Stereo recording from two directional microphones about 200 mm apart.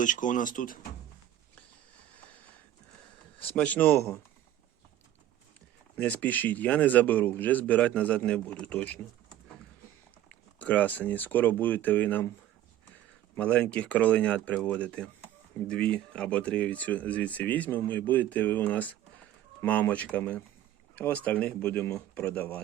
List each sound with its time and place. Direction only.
0.0 s speech: 40° left (ahead or behind)
3.4 s speech: 5° left (ahead or behind)
6.0 s speech: 10° left (ahead or behind)
10.6 s speech: 5° left (ahead or behind)
13.3 s speech: 5° left (ahead or behind)